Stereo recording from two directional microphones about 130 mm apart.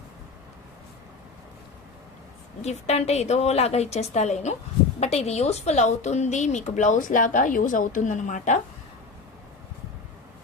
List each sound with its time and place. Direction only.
2.6 s a woman's voice: 55° left (ahead or behind)